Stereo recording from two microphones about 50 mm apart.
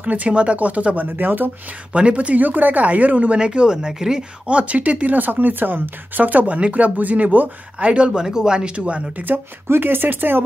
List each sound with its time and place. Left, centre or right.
0.0 s speech: right
1.0 s speech: right
2.0 s speech: right
3.3 s speech: centre
8.1 s speech: centre
9.7 s speech: right